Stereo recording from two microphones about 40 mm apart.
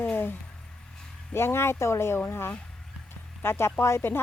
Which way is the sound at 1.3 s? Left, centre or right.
Left.